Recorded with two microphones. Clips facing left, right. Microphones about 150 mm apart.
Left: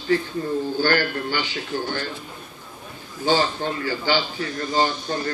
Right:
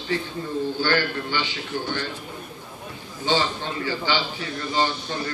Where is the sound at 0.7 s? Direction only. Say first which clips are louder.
Left 3 dB; 45° left (ahead or behind).